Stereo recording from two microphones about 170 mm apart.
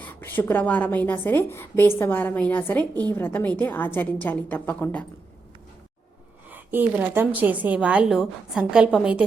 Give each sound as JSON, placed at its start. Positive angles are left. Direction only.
{"t": 0.0, "sound": "a woman's voice", "side_deg": 10}
{"t": 6.5, "sound": "a woman's voice", "side_deg": -10}